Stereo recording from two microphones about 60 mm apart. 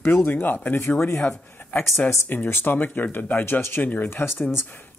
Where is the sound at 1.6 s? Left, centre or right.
Left.